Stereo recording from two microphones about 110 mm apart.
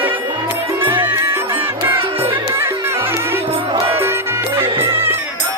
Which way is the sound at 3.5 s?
55° right (ahead or behind).